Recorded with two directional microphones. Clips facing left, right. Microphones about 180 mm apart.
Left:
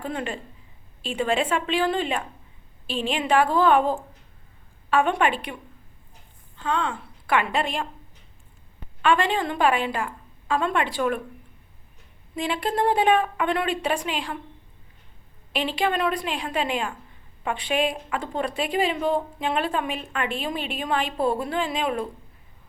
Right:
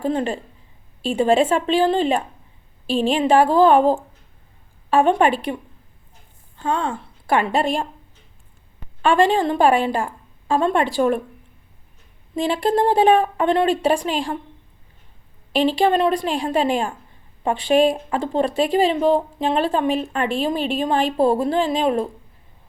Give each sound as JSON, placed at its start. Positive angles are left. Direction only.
{"t": 0.0, "sound": "speech", "side_deg": -30}
{"t": 6.6, "sound": "a woman's voice", "side_deg": -40}
{"t": 9.0, "sound": "speech", "side_deg": -35}
{"t": 12.4, "sound": "speech", "side_deg": -30}
{"t": 15.5, "sound": "speech", "side_deg": -35}